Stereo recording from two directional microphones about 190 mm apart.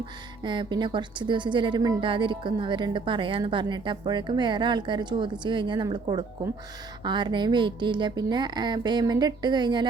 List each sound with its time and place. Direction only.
0.4 s a woman's voice: 25° right (ahead or behind)